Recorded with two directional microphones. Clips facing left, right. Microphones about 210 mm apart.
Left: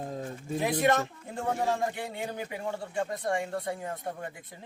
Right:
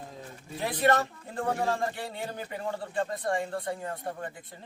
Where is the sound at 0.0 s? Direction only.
45° left (ahead or behind).